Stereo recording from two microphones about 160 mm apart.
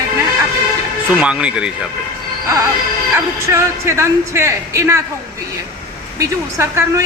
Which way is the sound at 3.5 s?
15° right (ahead or behind).